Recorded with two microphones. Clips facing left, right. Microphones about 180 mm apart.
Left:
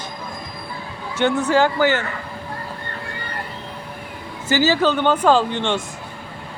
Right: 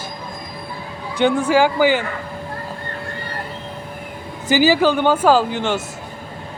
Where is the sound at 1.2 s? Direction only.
10° right (ahead or behind).